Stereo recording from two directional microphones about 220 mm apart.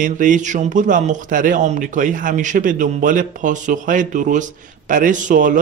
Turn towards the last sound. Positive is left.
turn(degrees=-35)  # may be behind; listen again after turning